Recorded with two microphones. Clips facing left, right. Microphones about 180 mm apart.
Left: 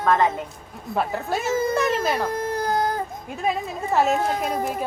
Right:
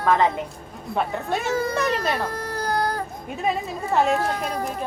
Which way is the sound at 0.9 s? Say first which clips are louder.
Even; centre (ahead or behind).